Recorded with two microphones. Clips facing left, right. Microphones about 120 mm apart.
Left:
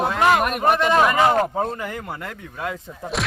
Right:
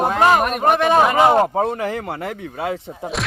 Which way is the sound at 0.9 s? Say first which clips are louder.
Right 3 dB; 25° right (ahead or behind).